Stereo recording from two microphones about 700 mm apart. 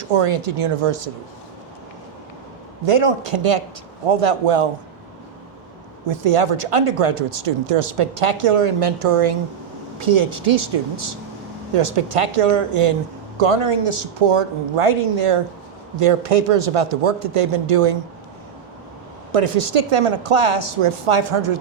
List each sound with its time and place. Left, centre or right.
0.2 s speech: right
2.8 s speech: right
6.1 s speech: right
19.3 s speech: right